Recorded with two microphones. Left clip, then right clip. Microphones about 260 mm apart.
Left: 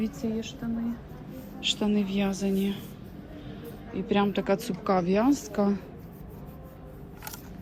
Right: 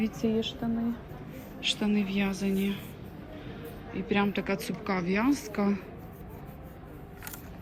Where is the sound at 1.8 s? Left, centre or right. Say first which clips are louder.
Left 2 dB; centre.